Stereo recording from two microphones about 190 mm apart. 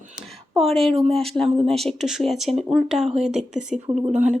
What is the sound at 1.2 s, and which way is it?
Speech, centre (ahead or behind).